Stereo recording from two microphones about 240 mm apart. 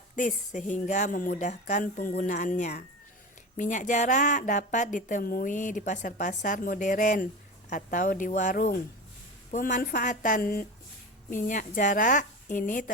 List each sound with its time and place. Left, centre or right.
0.2 s speech: left